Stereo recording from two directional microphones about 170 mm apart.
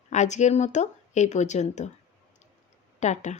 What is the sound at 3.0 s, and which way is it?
Speech, 45° left (ahead or behind).